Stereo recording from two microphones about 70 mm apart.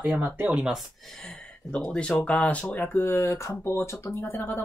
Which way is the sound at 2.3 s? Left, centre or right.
Centre.